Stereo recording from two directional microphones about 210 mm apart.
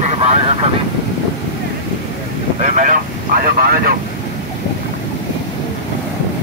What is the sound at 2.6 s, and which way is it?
Speech, 35° right (ahead or behind).